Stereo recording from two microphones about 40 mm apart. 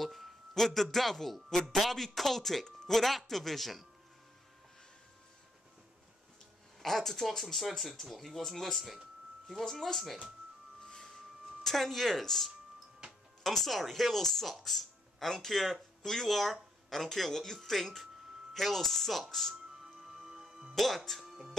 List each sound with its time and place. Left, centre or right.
0.0 s a sound: centre
0.9 s speech: centre
6.8 s speech: centre
10.9 s a sound: centre
11.6 s speech: centre
19.8 s music: centre
20.7 s speech: centre
21.2 s music: centre